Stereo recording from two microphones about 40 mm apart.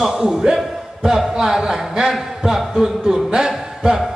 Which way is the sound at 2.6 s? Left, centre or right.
Centre.